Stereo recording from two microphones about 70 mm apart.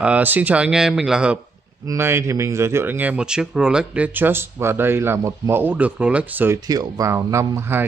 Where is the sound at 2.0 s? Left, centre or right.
Right.